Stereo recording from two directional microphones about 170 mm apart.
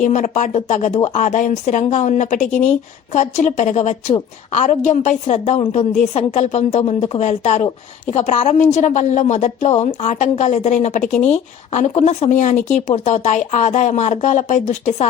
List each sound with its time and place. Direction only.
0.0 s a woman's voice: 45° left (ahead or behind)